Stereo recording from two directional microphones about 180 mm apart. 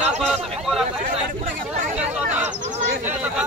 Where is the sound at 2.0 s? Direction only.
5° right (ahead or behind).